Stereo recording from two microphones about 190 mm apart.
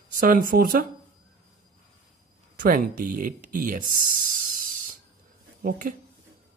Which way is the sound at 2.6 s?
50° right (ahead or behind).